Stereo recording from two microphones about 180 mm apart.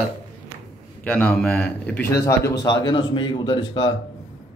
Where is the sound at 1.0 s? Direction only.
10° left (ahead or behind).